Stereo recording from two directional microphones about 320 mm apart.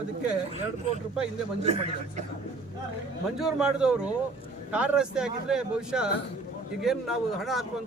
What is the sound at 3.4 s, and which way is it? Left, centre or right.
A man's voice, centre.